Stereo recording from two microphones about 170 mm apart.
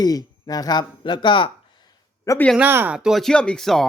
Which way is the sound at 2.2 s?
20° left (ahead or behind).